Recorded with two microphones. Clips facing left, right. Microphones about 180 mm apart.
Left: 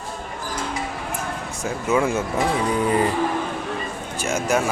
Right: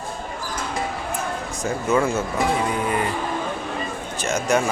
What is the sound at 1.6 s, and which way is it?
Speech, 10° left (ahead or behind).